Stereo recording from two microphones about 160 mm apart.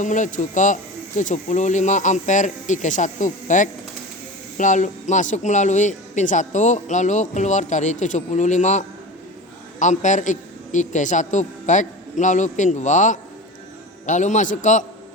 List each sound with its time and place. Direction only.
0.0 s a man's voice: 50° left (ahead or behind)